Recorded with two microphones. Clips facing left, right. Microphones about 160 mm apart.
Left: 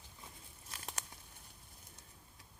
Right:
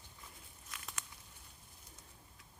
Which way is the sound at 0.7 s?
35° left (ahead or behind).